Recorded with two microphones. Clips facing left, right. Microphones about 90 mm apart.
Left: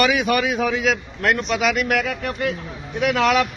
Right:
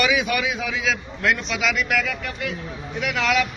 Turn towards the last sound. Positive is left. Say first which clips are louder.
# left 4 dB
turn(degrees=40)  # may be behind; listen again after turning